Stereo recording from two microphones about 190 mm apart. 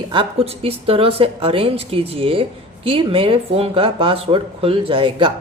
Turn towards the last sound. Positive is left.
turn(degrees=-30)  # may be behind; listen again after turning